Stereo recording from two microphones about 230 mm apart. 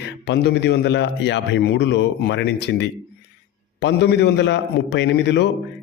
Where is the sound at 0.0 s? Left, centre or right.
Left.